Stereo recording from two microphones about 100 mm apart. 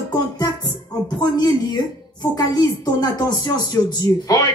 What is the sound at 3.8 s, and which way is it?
Speech, 40° left (ahead or behind).